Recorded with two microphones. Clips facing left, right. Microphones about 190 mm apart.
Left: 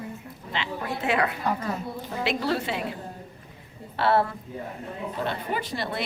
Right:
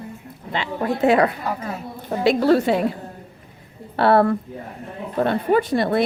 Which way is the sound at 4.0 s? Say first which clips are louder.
Right 7 dB; 55° right (ahead or behind).